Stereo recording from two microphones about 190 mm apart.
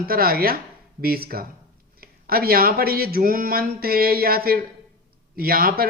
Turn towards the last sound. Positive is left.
turn(degrees=-50)  # may be behind; listen again after turning